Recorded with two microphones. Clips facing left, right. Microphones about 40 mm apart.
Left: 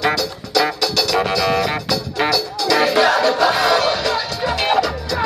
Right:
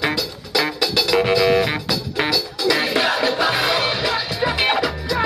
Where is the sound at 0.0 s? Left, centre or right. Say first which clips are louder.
Left 3 dB; centre.